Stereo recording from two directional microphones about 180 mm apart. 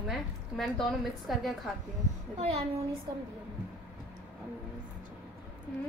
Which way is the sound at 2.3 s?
35° right (ahead or behind).